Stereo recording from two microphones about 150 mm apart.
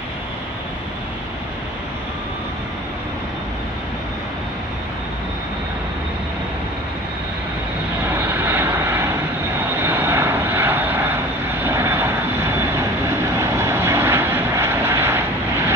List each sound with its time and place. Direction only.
8.3 s vehicle: 10° right (ahead or behind)